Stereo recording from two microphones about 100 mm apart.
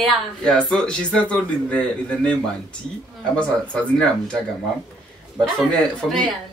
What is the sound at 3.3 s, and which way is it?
A man's voice, 10° left (ahead or behind).